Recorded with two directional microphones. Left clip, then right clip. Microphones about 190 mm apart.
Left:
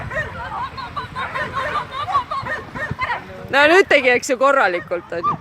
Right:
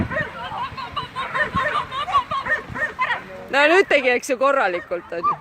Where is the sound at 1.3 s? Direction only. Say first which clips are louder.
Right 3 dB; 15° right (ahead or behind).